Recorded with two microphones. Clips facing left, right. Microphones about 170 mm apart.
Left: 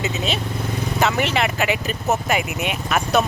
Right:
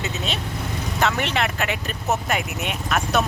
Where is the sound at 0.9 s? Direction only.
5° left (ahead or behind).